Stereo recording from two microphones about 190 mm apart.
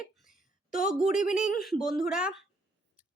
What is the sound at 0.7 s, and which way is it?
Speech, 45° left (ahead or behind).